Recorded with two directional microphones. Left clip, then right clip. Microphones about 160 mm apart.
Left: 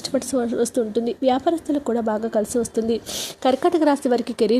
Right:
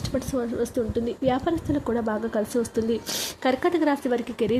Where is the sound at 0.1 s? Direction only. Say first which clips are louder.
Left 5 dB; 25° left (ahead or behind).